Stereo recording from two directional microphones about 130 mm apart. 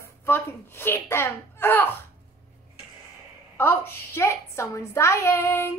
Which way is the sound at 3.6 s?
20° left (ahead or behind).